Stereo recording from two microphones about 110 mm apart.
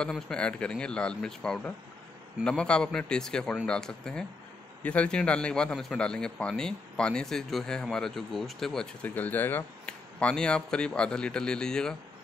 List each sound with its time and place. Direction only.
0.0 s a man's voice: 10° left (ahead or behind)
9.0 s a man's voice: 15° left (ahead or behind)
9.8 s a man's voice: 5° left (ahead or behind)